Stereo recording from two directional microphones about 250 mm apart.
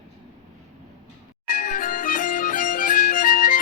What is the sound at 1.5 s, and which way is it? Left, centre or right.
Music, left.